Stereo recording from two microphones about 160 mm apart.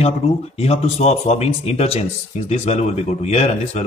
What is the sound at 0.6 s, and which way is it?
Speech, 40° left (ahead or behind).